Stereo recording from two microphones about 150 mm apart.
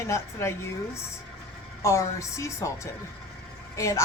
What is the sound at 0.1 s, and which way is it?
Speech, 20° left (ahead or behind).